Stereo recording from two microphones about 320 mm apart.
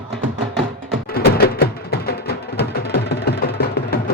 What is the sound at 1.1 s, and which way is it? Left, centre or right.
Music, left.